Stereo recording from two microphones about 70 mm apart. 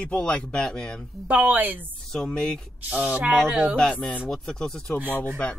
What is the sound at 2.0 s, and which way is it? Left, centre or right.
Speech, centre.